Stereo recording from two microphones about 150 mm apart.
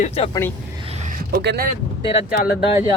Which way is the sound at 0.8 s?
50° right (ahead or behind).